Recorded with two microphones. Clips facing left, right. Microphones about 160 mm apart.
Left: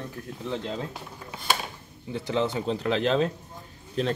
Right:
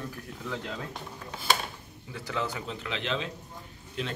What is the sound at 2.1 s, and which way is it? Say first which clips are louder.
Speech: left 7 dB; 25° left (ahead or behind).